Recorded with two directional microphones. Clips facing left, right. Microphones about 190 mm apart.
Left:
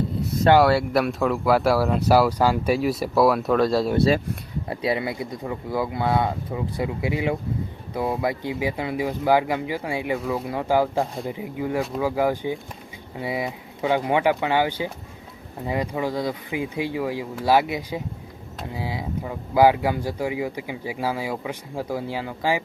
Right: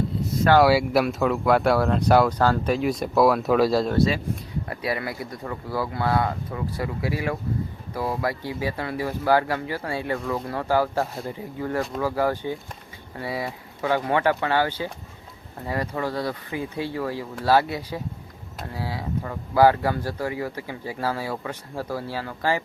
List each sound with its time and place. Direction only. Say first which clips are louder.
0.6 s speech: right 1 dB; centre (ahead or behind)
4.7 s speech: left 4 dB; 25° left (ahead or behind)